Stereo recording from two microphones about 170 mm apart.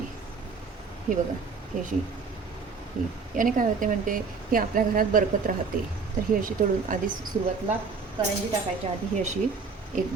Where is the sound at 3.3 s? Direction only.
50° right (ahead or behind).